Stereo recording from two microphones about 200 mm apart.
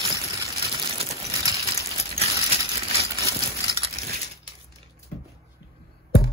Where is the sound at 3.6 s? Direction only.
30° right (ahead or behind).